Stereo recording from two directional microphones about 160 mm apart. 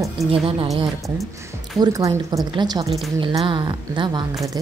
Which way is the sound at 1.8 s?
20° right (ahead or behind).